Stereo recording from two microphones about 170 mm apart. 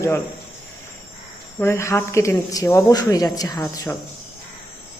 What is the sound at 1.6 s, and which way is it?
Speech, 15° left (ahead or behind).